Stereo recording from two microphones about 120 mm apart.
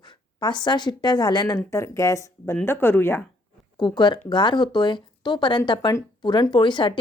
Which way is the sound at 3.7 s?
35° left (ahead or behind).